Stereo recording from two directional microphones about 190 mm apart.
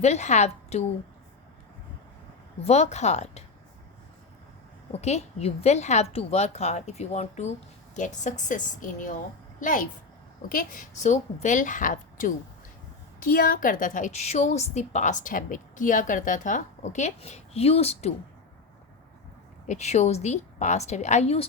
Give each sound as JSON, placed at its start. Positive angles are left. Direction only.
{"t": 0.0, "sound": "a woman's voice", "side_deg": 35}
{"t": 2.6, "sound": "a woman's voice", "side_deg": 35}
{"t": 4.9, "sound": "a woman's voice", "side_deg": 35}
{"t": 19.6, "sound": "a woman's voice", "side_deg": 35}